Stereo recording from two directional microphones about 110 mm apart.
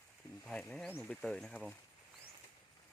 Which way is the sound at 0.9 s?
15° left (ahead or behind).